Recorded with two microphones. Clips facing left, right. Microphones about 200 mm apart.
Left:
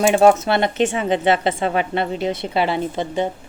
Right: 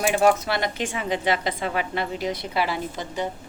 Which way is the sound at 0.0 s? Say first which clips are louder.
Left 6 dB; 25° left (ahead or behind).